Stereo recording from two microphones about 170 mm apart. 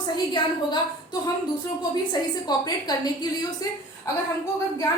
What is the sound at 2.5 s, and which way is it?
A woman's voice, 25° left (ahead or behind).